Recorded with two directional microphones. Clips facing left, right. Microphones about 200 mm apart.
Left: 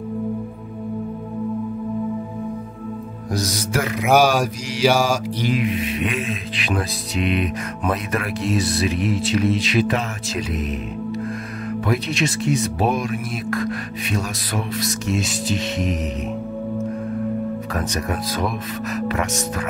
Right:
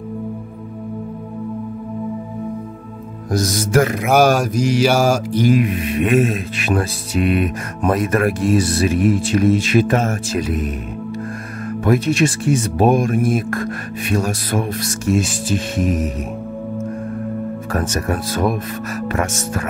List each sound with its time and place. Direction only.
3.3 s mantra: 50° right (ahead or behind)
11.8 s mantra: 50° right (ahead or behind)
17.7 s mantra: 45° right (ahead or behind)